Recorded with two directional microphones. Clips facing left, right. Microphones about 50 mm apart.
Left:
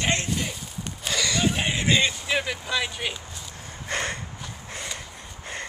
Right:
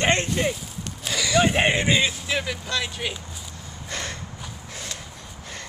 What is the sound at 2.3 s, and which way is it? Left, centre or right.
Speech, centre.